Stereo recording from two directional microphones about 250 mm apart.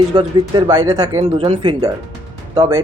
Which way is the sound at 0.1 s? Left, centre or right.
Centre.